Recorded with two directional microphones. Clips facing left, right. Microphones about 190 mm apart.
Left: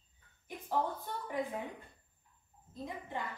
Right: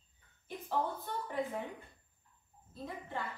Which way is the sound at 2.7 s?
15° left (ahead or behind).